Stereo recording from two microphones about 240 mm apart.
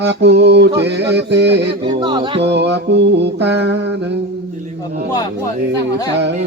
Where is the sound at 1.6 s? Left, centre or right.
Centre.